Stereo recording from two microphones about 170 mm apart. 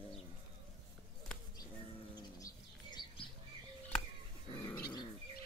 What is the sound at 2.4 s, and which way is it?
Bird, 25° left (ahead or behind).